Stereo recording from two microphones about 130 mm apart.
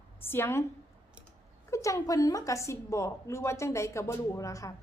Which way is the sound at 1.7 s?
25° left (ahead or behind).